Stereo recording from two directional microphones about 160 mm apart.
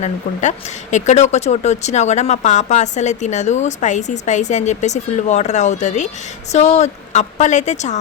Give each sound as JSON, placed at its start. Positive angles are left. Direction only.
{"t": 0.0, "sound": "speech", "side_deg": 50}